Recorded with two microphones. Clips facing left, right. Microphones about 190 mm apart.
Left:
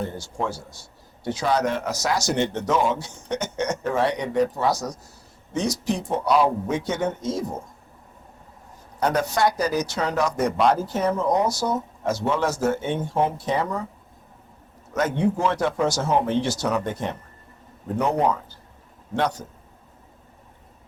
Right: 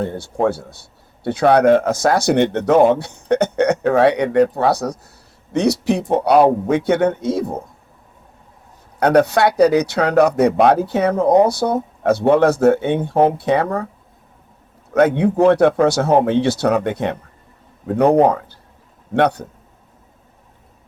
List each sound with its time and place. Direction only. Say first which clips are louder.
0.0 s a man's voice: right 9 dB; 60° right (ahead or behind)
9.0 s a man's voice: right 8 dB; 65° right (ahead or behind)
14.9 s a man's voice: right 9 dB; 60° right (ahead or behind)